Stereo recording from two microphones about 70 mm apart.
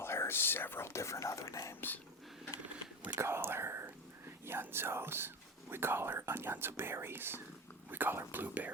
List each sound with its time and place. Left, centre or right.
0.0 s speech: left
3.2 s speech: right